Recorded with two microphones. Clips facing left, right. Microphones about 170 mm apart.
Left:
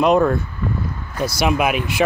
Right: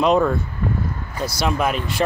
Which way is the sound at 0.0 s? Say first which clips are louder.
Left 2 dB; 5° left (ahead or behind).